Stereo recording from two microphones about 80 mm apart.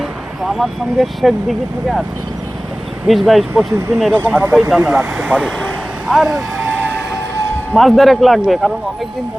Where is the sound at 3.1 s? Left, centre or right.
Centre.